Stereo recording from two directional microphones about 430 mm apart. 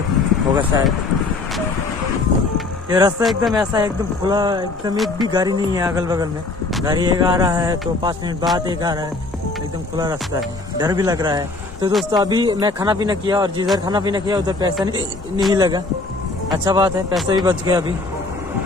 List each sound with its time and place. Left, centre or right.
0.6 s speech: centre
2.5 s speech: centre
10.8 s speech: centre